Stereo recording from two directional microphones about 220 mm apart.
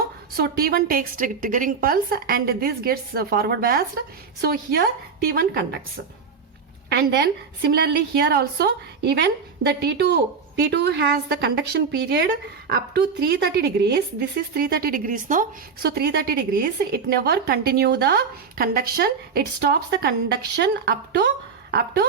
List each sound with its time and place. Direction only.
0.3 s a woman's voice: 45° right (ahead or behind)
6.9 s a woman's voice: 45° right (ahead or behind)